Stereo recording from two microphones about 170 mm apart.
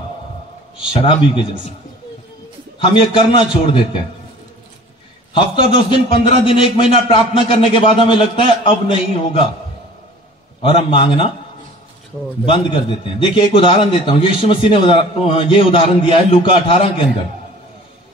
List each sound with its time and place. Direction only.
0.9 s a man's voice: 30° left (ahead or behind)
2.8 s a man's voice: 30° left (ahead or behind)
5.3 s a man's voice: 30° left (ahead or behind)
10.6 s a man's voice: 30° left (ahead or behind)
12.4 s a man's voice: 30° left (ahead or behind)